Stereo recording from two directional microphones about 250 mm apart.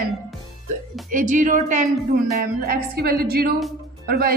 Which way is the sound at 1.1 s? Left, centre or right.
Right.